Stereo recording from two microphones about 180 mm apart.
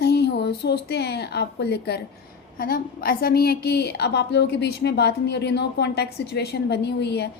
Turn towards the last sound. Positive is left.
turn(degrees=70)  # may be behind; listen again after turning